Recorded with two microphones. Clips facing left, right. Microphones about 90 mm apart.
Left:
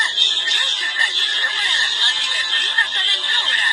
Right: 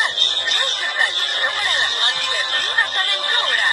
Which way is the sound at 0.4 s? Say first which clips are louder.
Right 2 dB; 25° right (ahead or behind).